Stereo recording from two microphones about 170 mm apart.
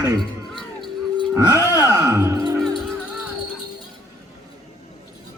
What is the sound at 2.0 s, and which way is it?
Music, 15° right (ahead or behind).